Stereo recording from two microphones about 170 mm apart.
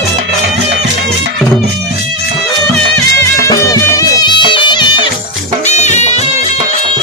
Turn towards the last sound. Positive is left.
turn(degrees=40)  # may be behind; listen again after turning